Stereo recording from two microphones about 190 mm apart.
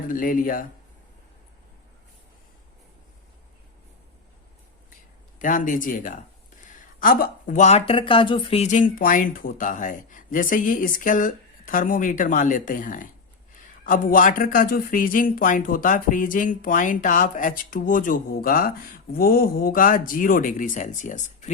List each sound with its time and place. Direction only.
0.1 s speech: 45° left (ahead or behind)
5.4 s speech: 45° left (ahead or behind)